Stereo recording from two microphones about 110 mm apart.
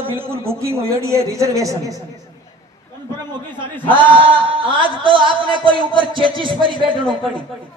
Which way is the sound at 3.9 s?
50° right (ahead or behind).